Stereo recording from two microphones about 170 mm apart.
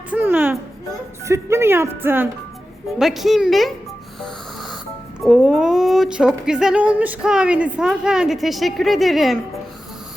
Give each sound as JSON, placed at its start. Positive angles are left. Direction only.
{"t": 0.1, "sound": "music", "side_deg": -10}
{"t": 1.2, "sound": "speech", "side_deg": -15}
{"t": 3.0, "sound": "speech", "side_deg": 0}
{"t": 5.2, "sound": "speech", "side_deg": 0}